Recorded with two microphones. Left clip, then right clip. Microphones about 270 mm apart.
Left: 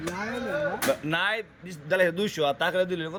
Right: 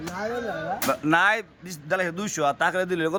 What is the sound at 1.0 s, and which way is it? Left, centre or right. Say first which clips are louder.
Speech: right 6 dB; centre.